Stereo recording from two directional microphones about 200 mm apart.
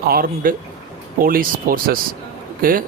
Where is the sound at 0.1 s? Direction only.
45° right (ahead or behind).